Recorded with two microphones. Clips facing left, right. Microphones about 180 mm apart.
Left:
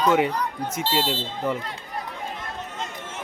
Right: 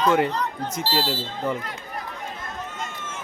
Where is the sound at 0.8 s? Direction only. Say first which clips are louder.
Even; 20° left (ahead or behind).